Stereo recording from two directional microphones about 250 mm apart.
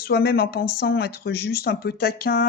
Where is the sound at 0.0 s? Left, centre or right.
Left.